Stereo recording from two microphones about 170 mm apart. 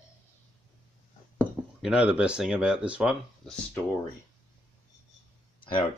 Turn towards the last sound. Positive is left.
turn(degrees=30)  # may be behind; listen again after turning